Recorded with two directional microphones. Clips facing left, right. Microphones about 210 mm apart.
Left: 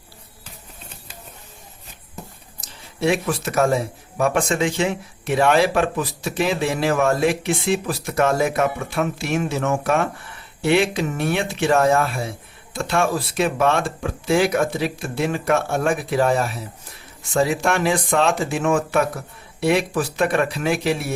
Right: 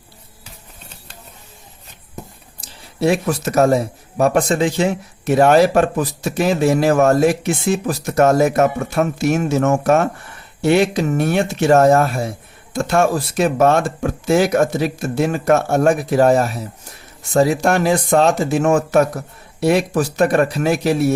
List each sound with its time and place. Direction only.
2.6 s speech: 40° right (ahead or behind)